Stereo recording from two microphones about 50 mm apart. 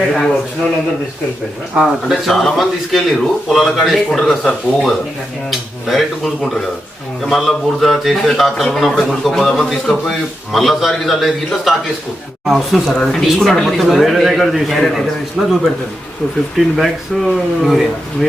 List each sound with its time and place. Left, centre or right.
0.1 s speech: centre
1.7 s speech: centre
2.2 s speech: centre
15.4 s speech: centre
16.6 s speech: centre